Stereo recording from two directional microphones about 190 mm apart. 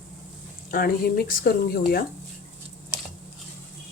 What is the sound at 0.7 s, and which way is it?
Speech, 50° left (ahead or behind).